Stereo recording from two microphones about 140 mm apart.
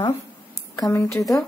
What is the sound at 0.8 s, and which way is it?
Speech, 20° left (ahead or behind).